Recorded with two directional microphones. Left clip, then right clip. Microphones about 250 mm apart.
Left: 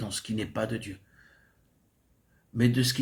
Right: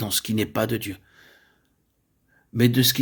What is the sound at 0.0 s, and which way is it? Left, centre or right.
Speech, right.